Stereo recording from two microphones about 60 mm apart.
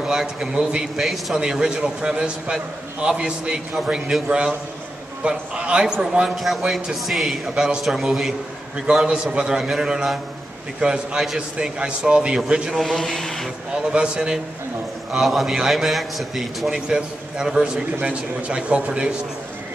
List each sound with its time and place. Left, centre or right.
0.0 s a man's voice: centre
1.4 s a man's voice: centre
6.3 s a man's voice: centre
8.7 s a man's voice: centre
12.7 s a man's voice: centre
13.8 s a man's voice: centre